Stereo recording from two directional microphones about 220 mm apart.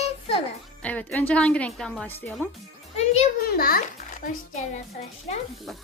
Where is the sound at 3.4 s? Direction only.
45° left (ahead or behind).